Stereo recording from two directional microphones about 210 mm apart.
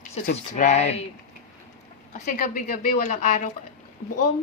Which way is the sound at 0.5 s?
35° left (ahead or behind).